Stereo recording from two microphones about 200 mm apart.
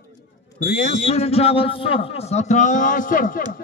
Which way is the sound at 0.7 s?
45° left (ahead or behind).